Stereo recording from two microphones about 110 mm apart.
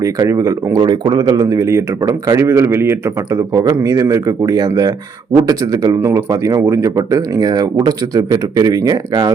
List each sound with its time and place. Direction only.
0.0 s speech: 30° right (ahead or behind)
1.5 s speech: 25° right (ahead or behind)